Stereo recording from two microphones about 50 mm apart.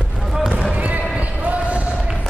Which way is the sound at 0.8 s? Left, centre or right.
Right.